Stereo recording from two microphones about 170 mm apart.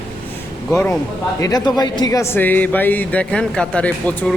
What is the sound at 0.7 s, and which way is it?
A woman's voice, 10° left (ahead or behind).